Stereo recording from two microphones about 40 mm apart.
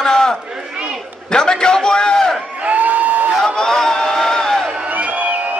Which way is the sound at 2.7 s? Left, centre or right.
Right.